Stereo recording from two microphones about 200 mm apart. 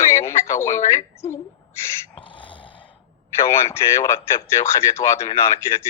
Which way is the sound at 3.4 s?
15° left (ahead or behind).